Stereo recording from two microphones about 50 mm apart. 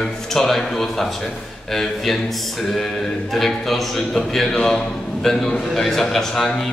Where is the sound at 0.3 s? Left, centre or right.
Centre.